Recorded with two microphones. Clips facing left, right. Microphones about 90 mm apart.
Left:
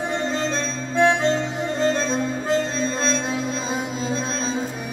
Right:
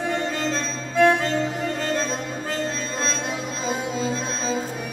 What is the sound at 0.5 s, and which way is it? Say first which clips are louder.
Organ: left 1 dB; 25° left (ahead or behind).